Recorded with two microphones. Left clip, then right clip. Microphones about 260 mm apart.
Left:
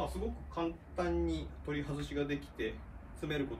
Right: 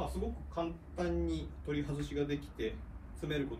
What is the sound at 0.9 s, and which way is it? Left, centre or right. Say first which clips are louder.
Speech: left 1 dB; centre.